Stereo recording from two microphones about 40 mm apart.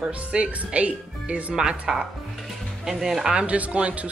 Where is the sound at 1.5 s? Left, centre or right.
Centre.